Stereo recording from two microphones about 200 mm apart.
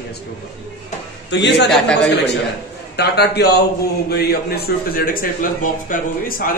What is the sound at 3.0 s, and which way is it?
A man's voice, 55° left (ahead or behind).